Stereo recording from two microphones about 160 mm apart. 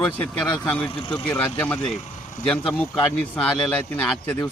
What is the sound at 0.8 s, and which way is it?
Speech, 30° left (ahead or behind).